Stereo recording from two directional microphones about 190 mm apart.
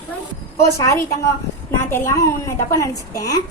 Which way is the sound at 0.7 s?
15° left (ahead or behind).